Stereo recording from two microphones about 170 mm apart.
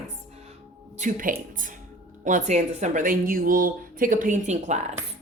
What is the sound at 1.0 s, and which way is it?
Speech, 50° right (ahead or behind).